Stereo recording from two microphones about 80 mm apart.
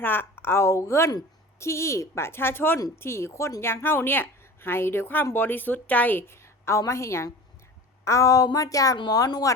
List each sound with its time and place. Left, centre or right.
0.0 s a woman's voice: left